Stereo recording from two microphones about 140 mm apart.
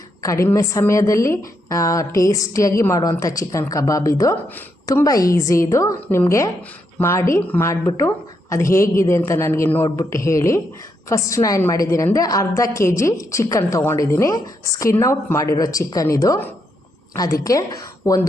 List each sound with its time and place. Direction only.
0.2 s a woman's voice: 20° left (ahead or behind)